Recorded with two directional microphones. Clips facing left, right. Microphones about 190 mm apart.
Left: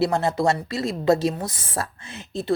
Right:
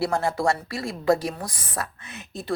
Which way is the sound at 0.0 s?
20° left (ahead or behind).